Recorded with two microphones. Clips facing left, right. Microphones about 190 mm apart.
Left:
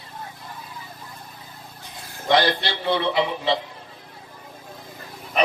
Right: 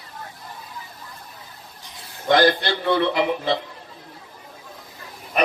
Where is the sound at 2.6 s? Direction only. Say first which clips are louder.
Right 3 dB; 50° right (ahead or behind).